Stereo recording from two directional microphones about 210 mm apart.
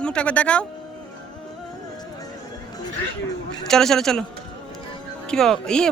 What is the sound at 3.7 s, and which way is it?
Speech, centre (ahead or behind).